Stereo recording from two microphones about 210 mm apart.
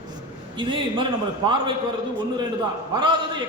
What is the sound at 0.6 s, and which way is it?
A man's voice, 25° right (ahead or behind).